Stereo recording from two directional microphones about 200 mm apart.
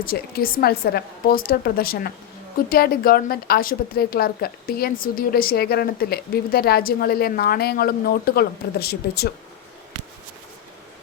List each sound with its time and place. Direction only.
0.0 s a woman's voice: 45° left (ahead or behind)